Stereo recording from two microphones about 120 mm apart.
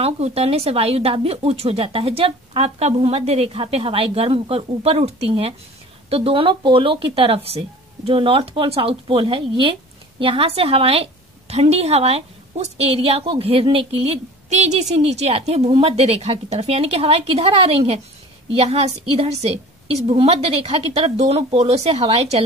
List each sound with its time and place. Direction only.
0.0 s speech: 55° right (ahead or behind)